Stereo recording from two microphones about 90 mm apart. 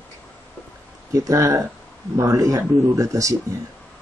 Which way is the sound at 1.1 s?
35° right (ahead or behind).